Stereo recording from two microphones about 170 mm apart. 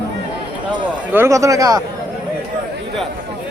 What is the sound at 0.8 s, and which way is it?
A man's voice, 10° right (ahead or behind).